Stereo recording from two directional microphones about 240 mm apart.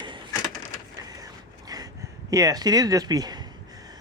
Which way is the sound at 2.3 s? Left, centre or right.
Centre.